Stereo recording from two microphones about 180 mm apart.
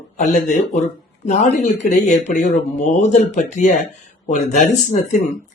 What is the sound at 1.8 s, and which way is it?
A man's voice, 40° left (ahead or behind).